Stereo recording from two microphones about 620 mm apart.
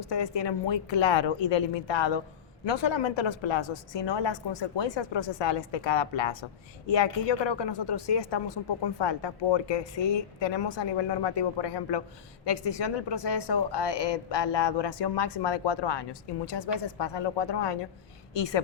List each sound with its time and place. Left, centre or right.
0.0 s a woman's voice: left